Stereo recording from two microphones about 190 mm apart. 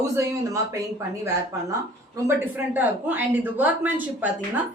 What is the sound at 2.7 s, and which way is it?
Speech, 10° right (ahead or behind).